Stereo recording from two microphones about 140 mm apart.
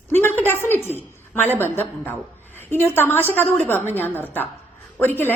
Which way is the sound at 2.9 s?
15° left (ahead or behind).